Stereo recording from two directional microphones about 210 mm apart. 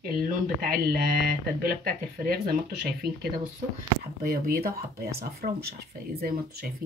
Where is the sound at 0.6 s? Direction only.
45° right (ahead or behind).